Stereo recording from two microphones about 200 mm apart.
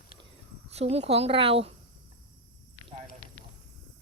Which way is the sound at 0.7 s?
30° right (ahead or behind).